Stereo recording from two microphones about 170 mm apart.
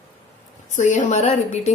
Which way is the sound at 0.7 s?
45° left (ahead or behind).